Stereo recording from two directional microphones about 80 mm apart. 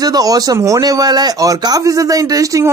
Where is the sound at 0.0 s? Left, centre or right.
Right.